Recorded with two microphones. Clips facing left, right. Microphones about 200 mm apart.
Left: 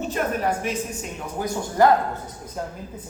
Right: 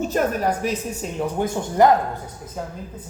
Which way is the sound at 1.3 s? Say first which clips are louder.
Right 1 dB; 25° right (ahead or behind).